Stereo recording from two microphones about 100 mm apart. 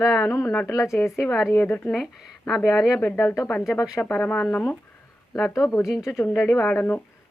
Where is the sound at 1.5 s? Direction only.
20° left (ahead or behind).